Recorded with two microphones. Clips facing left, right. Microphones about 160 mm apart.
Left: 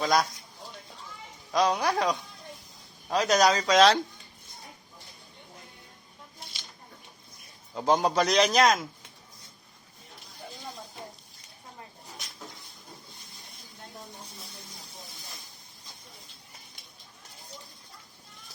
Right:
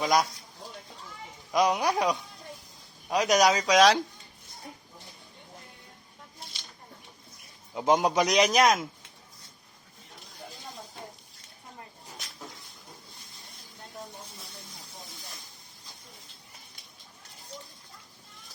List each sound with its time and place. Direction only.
0.0 s a man's voice: 15° right (ahead or behind)
1.5 s a man's voice: 20° right (ahead or behind)
7.7 s a man's voice: 15° right (ahead or behind)